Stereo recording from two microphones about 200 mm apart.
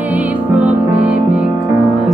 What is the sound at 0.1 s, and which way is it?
Music, 5° right (ahead or behind).